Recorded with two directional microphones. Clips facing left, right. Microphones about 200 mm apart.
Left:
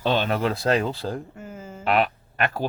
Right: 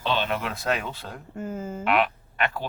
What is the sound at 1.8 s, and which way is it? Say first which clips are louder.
Speech: left 2 dB; 35° left (ahead or behind).